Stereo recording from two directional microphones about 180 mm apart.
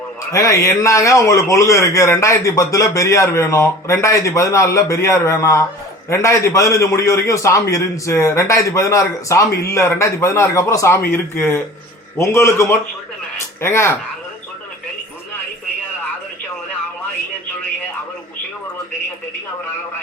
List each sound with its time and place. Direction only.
0.3 s speech: 15° left (ahead or behind)